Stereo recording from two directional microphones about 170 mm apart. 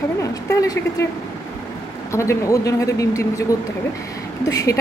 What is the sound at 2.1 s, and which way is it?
A woman's voice, 15° left (ahead or behind).